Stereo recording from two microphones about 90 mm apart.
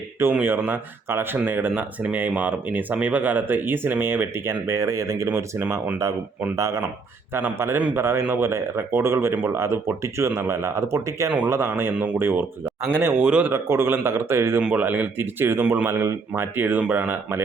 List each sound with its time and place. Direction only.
0.4 s speech: 25° right (ahead or behind)
7.3 s speech: 25° right (ahead or behind)
13.2 s speech: 15° right (ahead or behind)
13.5 s speech: 25° right (ahead or behind)
14.6 s speech: 15° right (ahead or behind)